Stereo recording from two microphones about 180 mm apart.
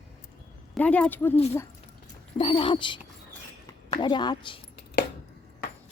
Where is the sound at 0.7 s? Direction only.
10° left (ahead or behind).